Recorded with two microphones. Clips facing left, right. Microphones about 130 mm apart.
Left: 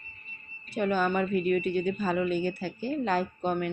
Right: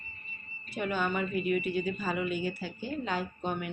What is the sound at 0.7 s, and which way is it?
Speech, 35° left (ahead or behind).